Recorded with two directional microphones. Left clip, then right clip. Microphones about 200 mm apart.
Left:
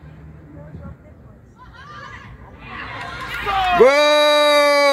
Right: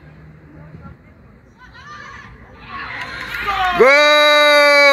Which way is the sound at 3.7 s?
15° left (ahead or behind).